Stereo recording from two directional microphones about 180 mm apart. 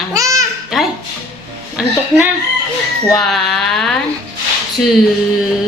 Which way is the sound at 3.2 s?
Centre (ahead or behind).